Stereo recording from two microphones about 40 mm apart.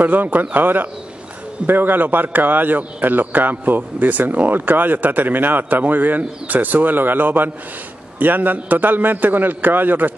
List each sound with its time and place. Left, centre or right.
0.0 s a man's voice: right